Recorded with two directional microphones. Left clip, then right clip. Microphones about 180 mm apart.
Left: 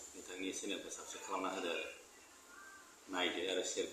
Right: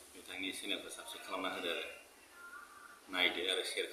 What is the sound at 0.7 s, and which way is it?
A man's voice, 5° left (ahead or behind).